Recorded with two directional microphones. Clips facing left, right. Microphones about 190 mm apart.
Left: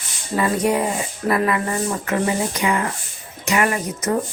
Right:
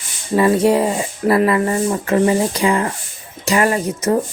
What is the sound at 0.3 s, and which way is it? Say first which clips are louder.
Speech: right 6 dB; 25° right (ahead or behind).